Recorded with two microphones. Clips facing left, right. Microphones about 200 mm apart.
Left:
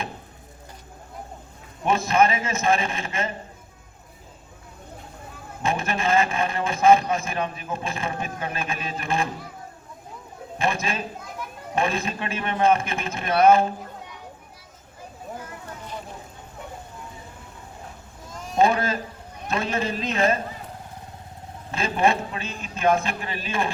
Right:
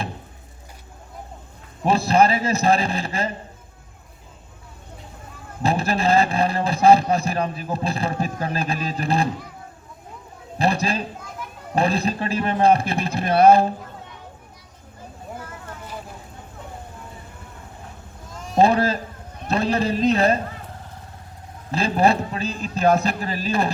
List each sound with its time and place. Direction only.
1.8 s speech: 35° right (ahead or behind)
5.6 s speech: 35° right (ahead or behind)
10.6 s a sound: 35° right (ahead or behind)
11.7 s speech: 35° right (ahead or behind)
18.5 s speech: 35° right (ahead or behind)
21.7 s speech: 35° right (ahead or behind)